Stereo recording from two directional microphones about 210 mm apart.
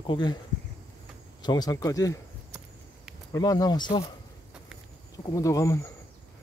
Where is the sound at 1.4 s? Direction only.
20° left (ahead or behind).